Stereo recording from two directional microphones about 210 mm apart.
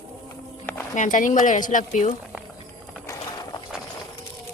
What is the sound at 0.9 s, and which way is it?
Speech, 35° left (ahead or behind).